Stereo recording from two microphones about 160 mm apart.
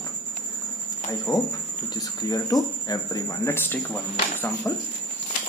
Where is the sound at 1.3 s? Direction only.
20° left (ahead or behind).